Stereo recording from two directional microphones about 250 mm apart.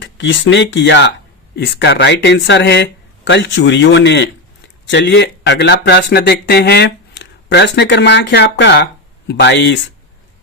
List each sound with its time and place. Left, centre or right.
0.0 s speech: left